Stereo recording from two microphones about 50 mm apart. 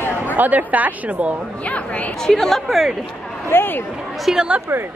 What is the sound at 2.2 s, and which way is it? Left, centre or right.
Speech, centre.